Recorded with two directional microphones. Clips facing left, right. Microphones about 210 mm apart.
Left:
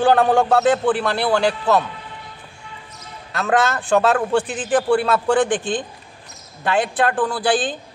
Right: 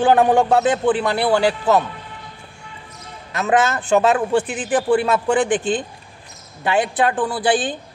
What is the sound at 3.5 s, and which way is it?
Speech, 15° right (ahead or behind).